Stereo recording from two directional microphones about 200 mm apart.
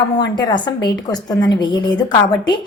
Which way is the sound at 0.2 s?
20° left (ahead or behind).